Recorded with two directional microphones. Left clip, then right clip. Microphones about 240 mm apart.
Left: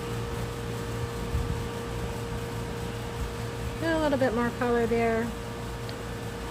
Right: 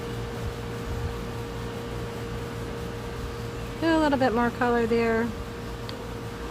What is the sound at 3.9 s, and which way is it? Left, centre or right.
Speech, right.